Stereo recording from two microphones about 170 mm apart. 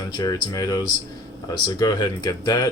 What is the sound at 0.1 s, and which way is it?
Speech, 20° left (ahead or behind).